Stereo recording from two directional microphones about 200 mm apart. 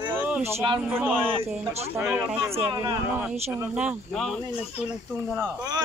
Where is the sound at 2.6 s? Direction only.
25° right (ahead or behind).